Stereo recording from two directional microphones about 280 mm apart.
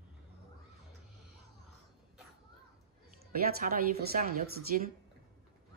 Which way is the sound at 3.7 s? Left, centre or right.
Right.